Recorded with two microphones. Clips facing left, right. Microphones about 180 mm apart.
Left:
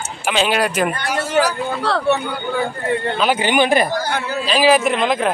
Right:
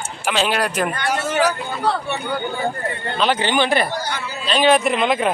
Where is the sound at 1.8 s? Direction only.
80° left.